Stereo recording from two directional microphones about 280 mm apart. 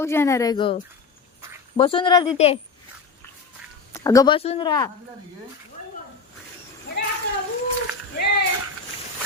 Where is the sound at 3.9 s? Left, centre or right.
Centre.